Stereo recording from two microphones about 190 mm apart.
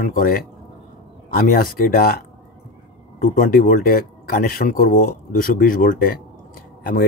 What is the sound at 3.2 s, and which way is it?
Speech, 45° left (ahead or behind).